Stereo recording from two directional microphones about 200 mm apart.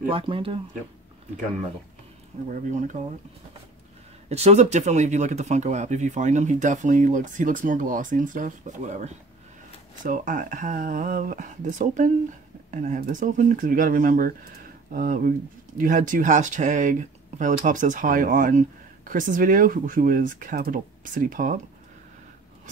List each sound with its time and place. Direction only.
0.1 s speech: 25° right (ahead or behind)
2.5 s speech: 40° right (ahead or behind)
4.3 s speech: 30° right (ahead or behind)